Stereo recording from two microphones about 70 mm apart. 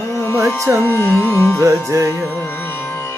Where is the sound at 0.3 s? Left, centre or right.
Right.